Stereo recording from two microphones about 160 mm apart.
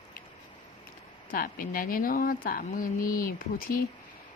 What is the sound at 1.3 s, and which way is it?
Speech, 65° left (ahead or behind).